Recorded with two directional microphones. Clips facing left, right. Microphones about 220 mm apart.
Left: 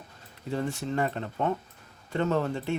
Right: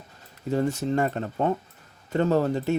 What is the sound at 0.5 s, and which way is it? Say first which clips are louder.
Speech: right 5 dB; 40° right (ahead or behind).